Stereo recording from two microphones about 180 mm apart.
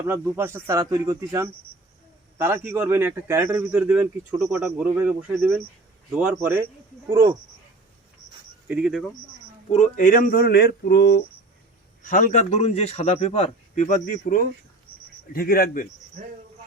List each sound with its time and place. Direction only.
0.0 s speech: 15° right (ahead or behind)
8.6 s speech: 5° right (ahead or behind)
9.7 s speech: 45° left (ahead or behind); by 11.2 s 65° left (ahead or behind)
12.0 s a man's voice: 45° left (ahead or behind)